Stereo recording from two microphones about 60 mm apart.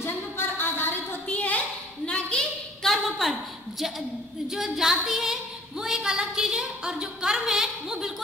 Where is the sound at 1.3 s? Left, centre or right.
Left.